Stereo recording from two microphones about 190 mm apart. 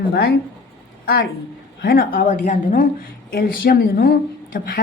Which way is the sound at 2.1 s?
40° left (ahead or behind).